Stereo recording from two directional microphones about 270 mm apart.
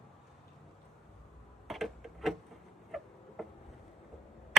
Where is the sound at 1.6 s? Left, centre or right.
Centre.